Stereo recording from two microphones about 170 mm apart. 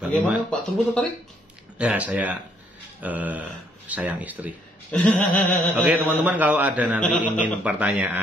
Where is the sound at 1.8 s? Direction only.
10° right (ahead or behind).